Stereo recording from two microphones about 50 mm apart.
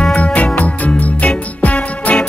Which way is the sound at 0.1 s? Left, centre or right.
Left.